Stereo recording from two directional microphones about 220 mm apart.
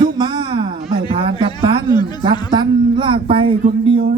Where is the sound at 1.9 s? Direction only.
20° left (ahead or behind).